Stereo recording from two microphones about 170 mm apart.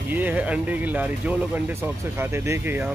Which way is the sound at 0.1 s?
10° right (ahead or behind).